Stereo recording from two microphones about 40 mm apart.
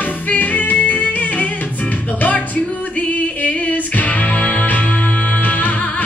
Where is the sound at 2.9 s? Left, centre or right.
Left.